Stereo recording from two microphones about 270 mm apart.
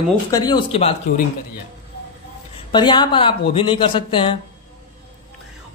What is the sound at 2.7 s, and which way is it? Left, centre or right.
A woman's voice, centre.